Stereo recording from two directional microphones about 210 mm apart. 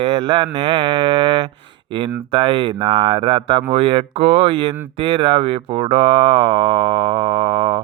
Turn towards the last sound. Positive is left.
turn(degrees=-25)  # may be behind; listen again after turning